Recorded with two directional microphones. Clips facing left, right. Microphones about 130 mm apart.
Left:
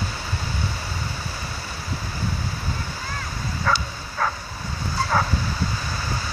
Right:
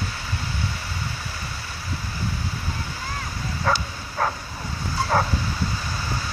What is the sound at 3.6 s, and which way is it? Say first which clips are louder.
Bow-wow: even; 15° right (ahead or behind).